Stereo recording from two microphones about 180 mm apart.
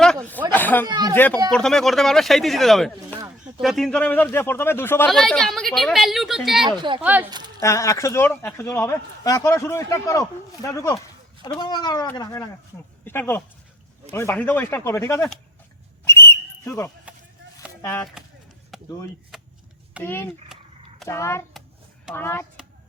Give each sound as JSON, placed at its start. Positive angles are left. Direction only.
{"t": 0.0, "sound": "a sound", "side_deg": 5}
{"t": 0.5, "sound": "speech", "side_deg": 10}
{"t": 0.9, "sound": "speech", "side_deg": -20}
{"t": 1.1, "sound": "a woman's voice", "side_deg": 10}
{"t": 5.0, "sound": "a woman's voice", "side_deg": 0}
{"t": 6.7, "sound": "speech", "side_deg": -25}
{"t": 7.0, "sound": "speech", "side_deg": -10}
{"t": 7.3, "sound": "speech", "side_deg": -25}
{"t": 7.6, "sound": "speech", "side_deg": 15}
{"t": 16.0, "sound": "whistle", "side_deg": 15}
{"t": 18.2, "sound": "run", "side_deg": -5}
{"t": 18.7, "sound": "vehicle", "side_deg": 0}
{"t": 19.3, "sound": "a sound", "side_deg": 0}
{"t": 20.0, "sound": "speech", "side_deg": 10}